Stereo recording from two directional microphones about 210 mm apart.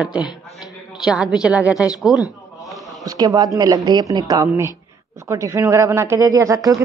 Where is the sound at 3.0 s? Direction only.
15° right (ahead or behind).